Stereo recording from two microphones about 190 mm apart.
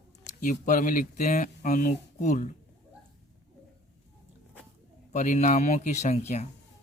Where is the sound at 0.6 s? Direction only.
45° left (ahead or behind).